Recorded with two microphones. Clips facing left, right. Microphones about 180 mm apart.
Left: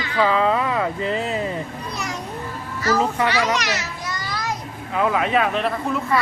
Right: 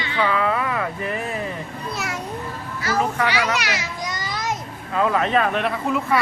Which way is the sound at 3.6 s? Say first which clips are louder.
Left 1 dB; 10° right (ahead or behind).